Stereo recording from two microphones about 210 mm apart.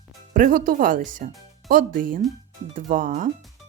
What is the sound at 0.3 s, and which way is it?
Speech, 40° right (ahead or behind).